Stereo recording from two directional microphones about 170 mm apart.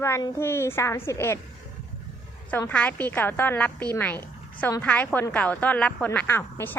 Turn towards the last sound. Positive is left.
turn(degrees=15)  # may be behind; listen again after turning